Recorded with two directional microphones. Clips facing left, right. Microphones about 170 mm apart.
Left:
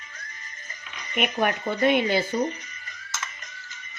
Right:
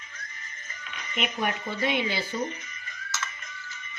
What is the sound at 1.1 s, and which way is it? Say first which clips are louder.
Speech: left 5 dB; 55° left (ahead or behind).